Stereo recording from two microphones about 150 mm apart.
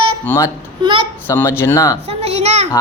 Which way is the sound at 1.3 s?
15° left (ahead or behind).